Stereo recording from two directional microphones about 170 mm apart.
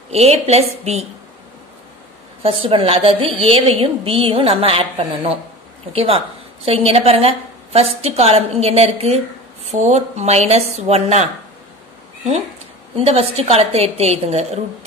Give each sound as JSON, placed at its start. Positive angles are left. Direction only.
{"t": 0.1, "sound": "a woman's voice", "side_deg": -40}
{"t": 2.4, "sound": "a woman's voice", "side_deg": -30}
{"t": 12.9, "sound": "a woman's voice", "side_deg": -35}